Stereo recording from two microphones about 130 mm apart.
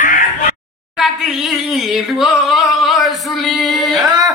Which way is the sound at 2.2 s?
Centre (ahead or behind).